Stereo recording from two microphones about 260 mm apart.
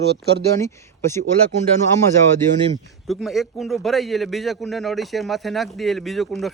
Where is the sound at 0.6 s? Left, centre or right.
Centre.